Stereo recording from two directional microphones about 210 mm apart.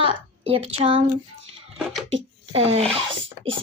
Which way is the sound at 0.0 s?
25° right (ahead or behind).